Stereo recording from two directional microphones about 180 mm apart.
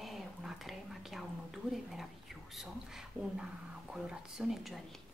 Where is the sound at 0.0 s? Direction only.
Centre (ahead or behind).